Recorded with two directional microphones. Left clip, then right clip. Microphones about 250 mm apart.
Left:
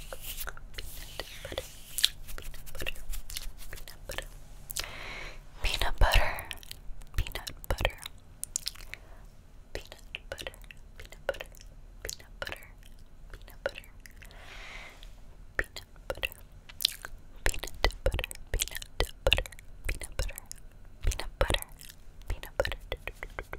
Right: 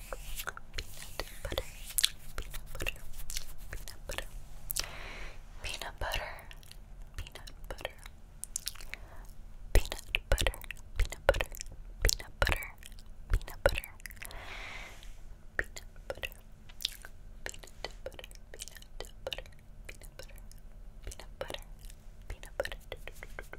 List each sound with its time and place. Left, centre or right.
0.1 s whispering: centre
4.7 s a sound: centre
5.6 s whispering: left
8.6 s biting: centre
9.7 s whispering: right; by 15.0 s centre
15.5 s chewing: centre
16.8 s biting: left
17.4 s a sound: left
21.0 s whispering: left
22.3 s whispering: left